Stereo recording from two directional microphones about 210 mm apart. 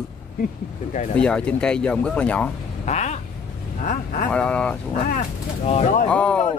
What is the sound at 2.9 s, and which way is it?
Vehicle, 35° left (ahead or behind).